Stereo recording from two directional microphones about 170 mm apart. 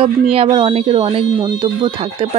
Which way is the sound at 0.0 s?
30° right (ahead or behind).